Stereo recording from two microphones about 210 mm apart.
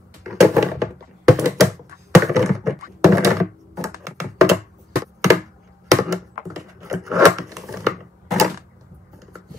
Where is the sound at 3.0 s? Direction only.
15° right (ahead or behind).